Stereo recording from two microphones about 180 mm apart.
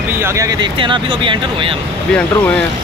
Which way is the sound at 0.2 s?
20° right (ahead or behind).